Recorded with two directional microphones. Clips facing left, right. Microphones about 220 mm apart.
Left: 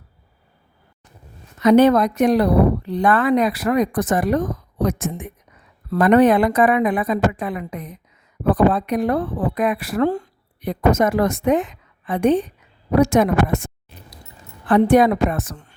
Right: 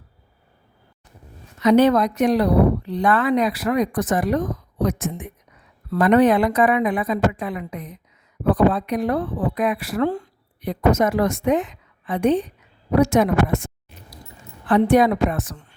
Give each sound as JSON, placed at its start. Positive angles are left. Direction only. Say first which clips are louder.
{"t": 1.6, "sound": "speech", "louder": "left 2 dB", "side_deg": 50}
{"t": 14.7, "sound": "speech", "louder": "left 2 dB", "side_deg": 50}